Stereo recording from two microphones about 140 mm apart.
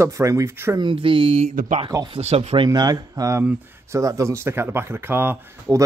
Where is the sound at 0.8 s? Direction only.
35° right (ahead or behind).